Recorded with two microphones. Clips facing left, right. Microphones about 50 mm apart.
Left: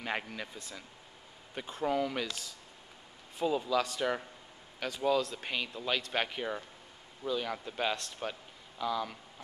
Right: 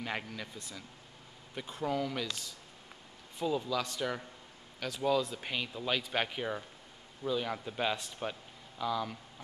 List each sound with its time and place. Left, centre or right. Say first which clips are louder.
0.0 s a man's voice: left 2 dB; centre
1.7 s a man's voice: left 2 dB; centre
3.3 s a man's voice: left 3 dB; centre